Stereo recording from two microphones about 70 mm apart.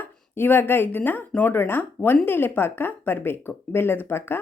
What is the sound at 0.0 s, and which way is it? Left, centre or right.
Speech, left.